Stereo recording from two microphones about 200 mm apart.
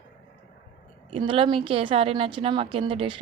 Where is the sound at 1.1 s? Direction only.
25° right (ahead or behind).